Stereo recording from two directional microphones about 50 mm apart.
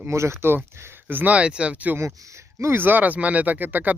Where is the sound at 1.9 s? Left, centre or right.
Right.